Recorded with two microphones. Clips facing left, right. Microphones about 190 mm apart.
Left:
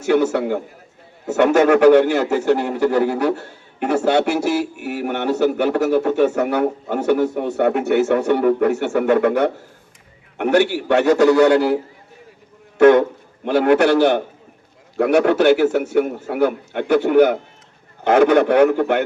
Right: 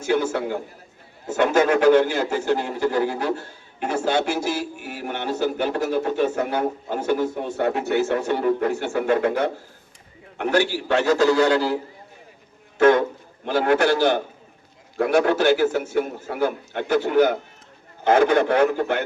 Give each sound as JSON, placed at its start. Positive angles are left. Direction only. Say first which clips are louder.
{"t": 0.0, "sound": "a man's voice", "louder": "left 5 dB", "side_deg": 70}
{"t": 12.8, "sound": "a man's voice", "louder": "left 5 dB", "side_deg": 60}